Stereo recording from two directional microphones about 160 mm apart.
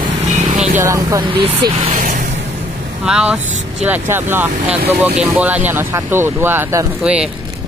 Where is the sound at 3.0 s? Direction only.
5° right (ahead or behind).